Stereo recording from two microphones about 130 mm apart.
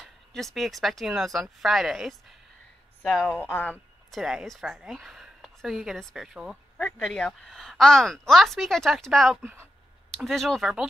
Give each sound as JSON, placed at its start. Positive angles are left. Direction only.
{"t": 0.0, "sound": "a woman's voice", "side_deg": 0}
{"t": 3.4, "sound": "speech", "side_deg": 15}
{"t": 4.1, "sound": "speech", "side_deg": -5}
{"t": 6.8, "sound": "a woman's voice", "side_deg": 5}
{"t": 9.4, "sound": "speech", "side_deg": -15}
{"t": 10.1, "sound": "a woman's voice", "side_deg": 0}